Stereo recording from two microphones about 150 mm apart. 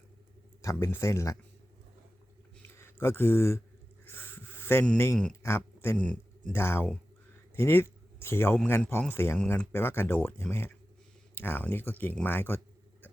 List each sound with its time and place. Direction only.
0.6 s speech: 20° left (ahead or behind)
2.7 s speech: 15° left (ahead or behind)
4.0 s a sound: 15° left (ahead or behind)
5.4 s speech: 15° left (ahead or behind)